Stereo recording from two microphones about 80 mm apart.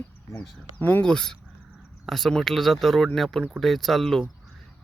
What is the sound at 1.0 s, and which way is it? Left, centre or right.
Speech, centre.